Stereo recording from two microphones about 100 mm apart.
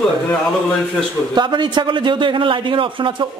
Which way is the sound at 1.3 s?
50° right (ahead or behind).